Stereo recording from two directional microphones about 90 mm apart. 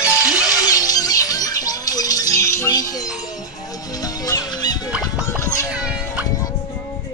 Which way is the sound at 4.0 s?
45° left (ahead or behind).